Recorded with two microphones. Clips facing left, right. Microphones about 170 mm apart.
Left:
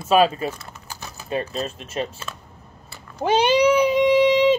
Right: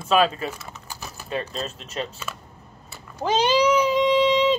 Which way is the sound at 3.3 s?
60° left (ahead or behind).